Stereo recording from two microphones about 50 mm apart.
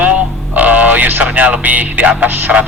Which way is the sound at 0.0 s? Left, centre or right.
Right.